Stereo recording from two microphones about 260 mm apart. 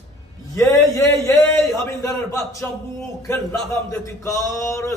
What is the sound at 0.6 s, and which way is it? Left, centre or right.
A man's voice, centre.